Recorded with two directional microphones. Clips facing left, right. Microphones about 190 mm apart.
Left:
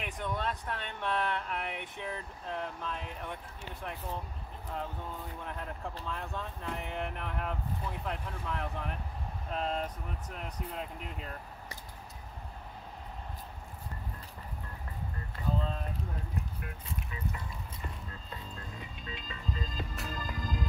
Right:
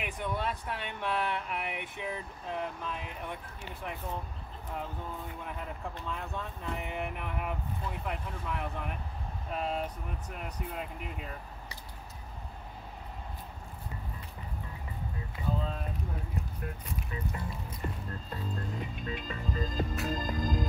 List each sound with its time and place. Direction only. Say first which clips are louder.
0.0 s speech: right 1 dB; 5° right (ahead or behind)
5.4 s speech: even; 5° right (ahead or behind)
15.3 s boat: even; 5° right (ahead or behind)
18.1 s speech: right 6 dB; 55° right (ahead or behind)
20.1 s music: right 6 dB; 40° right (ahead or behind)